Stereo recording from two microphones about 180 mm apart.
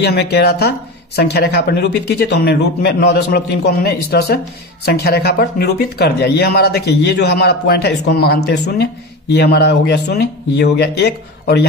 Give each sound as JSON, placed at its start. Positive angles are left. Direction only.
{"t": 0.0, "sound": "speech", "side_deg": 65}